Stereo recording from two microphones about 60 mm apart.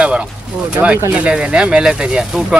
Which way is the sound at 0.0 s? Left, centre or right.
Centre.